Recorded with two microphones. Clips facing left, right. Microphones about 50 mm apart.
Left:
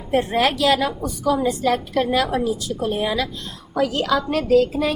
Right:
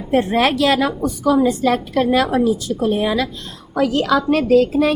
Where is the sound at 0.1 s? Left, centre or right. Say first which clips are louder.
Right 3 dB; right.